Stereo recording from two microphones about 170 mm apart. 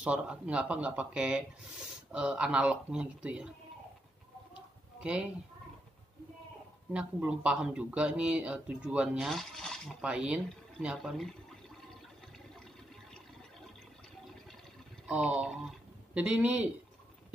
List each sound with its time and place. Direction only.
0.0 s speech: 5° right (ahead or behind)
4.6 s chicken: 5° right (ahead or behind)
6.9 s speech: 5° right (ahead or behind)
15.0 s speech: 5° right (ahead or behind)